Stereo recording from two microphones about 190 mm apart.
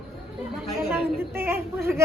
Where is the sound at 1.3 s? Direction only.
10° right (ahead or behind).